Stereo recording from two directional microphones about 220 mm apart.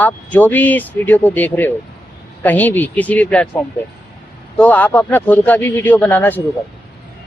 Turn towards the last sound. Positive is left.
turn(degrees=10)  # may be behind; listen again after turning